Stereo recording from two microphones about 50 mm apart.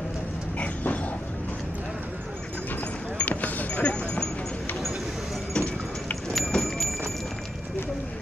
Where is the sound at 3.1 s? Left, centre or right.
Left.